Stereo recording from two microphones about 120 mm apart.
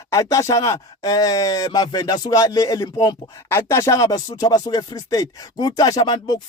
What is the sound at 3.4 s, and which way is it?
Speech, 20° left (ahead or behind).